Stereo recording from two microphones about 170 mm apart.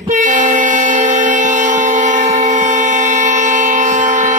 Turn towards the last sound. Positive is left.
turn(degrees=-45)  # may be behind; listen again after turning